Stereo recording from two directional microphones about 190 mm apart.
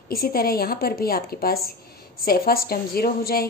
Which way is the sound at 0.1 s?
50° left (ahead or behind).